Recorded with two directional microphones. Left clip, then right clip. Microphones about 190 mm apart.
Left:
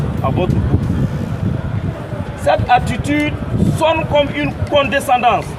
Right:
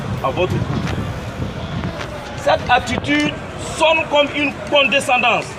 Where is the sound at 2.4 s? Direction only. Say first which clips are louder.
Left 2 dB; 25° left (ahead or behind).